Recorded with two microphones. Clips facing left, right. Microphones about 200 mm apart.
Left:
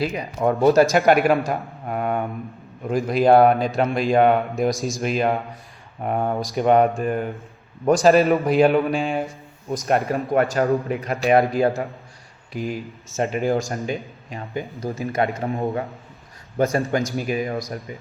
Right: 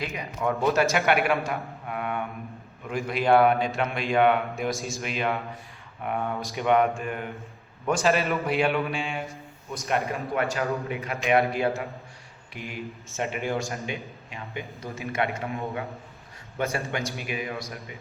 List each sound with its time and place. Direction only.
0.0 s a man's voice: 35° left (ahead or behind)
10.3 s a man's voice: 40° left (ahead or behind)